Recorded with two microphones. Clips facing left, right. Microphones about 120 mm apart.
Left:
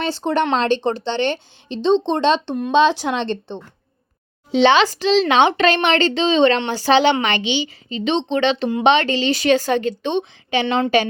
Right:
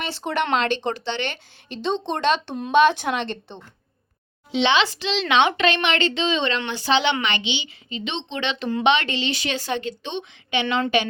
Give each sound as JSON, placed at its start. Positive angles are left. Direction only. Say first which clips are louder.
{"t": 0.0, "sound": "a woman's voice", "louder": "left 6 dB", "side_deg": 30}
{"t": 4.5, "sound": "a woman's voice", "louder": "left 6 dB", "side_deg": 40}